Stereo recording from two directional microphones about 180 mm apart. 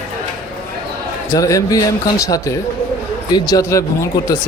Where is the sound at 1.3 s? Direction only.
20° left (ahead or behind).